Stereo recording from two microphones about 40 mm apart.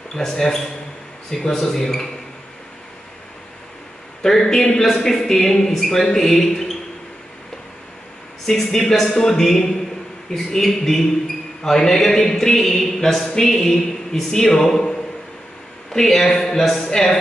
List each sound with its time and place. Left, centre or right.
0.1 s a man's voice: centre
4.2 s a man's voice: centre
8.5 s a man's voice: centre
13.2 s a sound: centre
13.5 s a man's voice: centre
15.9 s a man's voice: centre